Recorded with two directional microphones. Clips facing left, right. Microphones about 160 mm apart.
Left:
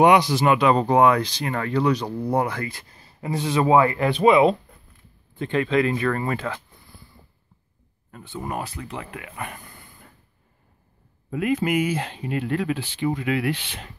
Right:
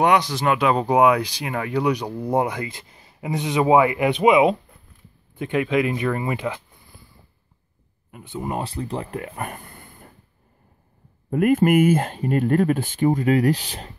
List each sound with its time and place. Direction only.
0.0 s speech: 10° left (ahead or behind); by 6.6 s 15° right (ahead or behind)
8.1 s speech: 15° right (ahead or behind); by 10.0 s 45° right (ahead or behind)
11.2 s speech: 50° right (ahead or behind)